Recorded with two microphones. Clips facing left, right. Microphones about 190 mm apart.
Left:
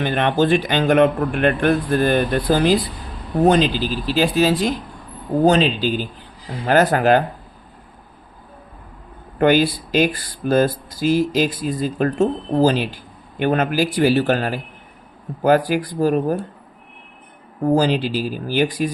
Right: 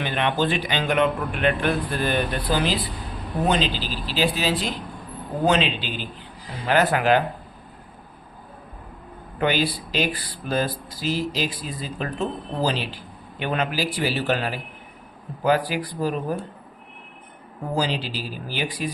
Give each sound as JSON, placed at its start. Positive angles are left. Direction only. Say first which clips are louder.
{"t": 0.0, "sound": "speech", "louder": "left 5 dB", "side_deg": 45}
{"t": 9.4, "sound": "speech", "louder": "left 7 dB", "side_deg": 50}
{"t": 17.7, "sound": "speech", "louder": "left 9 dB", "side_deg": 50}